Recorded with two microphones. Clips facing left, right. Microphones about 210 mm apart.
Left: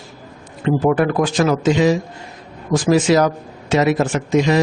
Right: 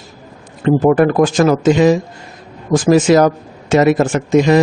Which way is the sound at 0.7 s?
45° right (ahead or behind).